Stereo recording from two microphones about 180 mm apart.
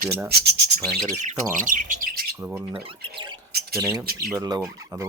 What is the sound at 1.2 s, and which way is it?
Speech, 45° right (ahead or behind).